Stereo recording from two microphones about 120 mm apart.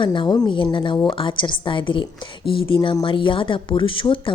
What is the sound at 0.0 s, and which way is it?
A woman's voice, 40° left (ahead or behind).